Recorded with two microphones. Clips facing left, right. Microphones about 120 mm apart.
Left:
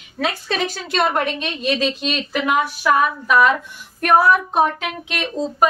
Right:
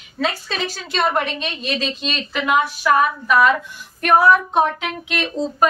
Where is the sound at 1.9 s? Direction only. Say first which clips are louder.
Left 2 dB; 10° left (ahead or behind).